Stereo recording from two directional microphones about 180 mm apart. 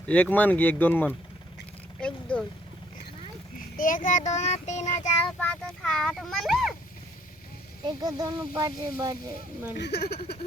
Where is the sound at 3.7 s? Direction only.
50° left (ahead or behind).